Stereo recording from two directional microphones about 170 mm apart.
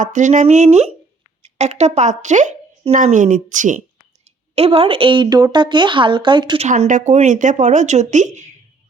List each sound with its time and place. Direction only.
0.0 s speech: 45° right (ahead or behind)
4.5 s a woman's voice: 35° right (ahead or behind)
6.7 s speech: 45° right (ahead or behind)